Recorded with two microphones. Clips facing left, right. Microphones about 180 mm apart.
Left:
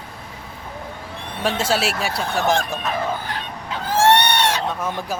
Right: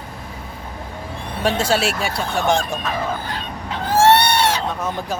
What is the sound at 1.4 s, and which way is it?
Speech, centre (ahead or behind).